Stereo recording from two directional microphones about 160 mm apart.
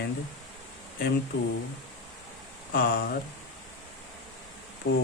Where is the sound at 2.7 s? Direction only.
70° left (ahead or behind).